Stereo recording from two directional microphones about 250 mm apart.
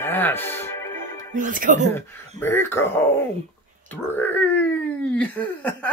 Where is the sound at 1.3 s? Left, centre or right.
Right.